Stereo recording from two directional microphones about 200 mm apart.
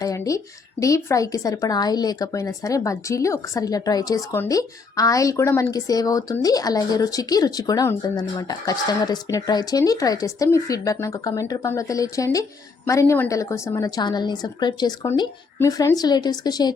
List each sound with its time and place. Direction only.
0.0 s a woman's voice: 15° left (ahead or behind)